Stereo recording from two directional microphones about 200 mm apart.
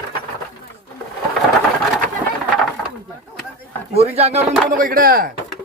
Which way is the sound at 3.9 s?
30° right (ahead or behind).